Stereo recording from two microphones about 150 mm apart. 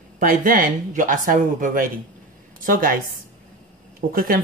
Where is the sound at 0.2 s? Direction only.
65° right (ahead or behind).